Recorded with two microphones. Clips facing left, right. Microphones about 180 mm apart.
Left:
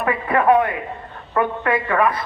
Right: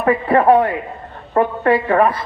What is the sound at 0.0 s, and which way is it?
A man's voice, 35° right (ahead or behind).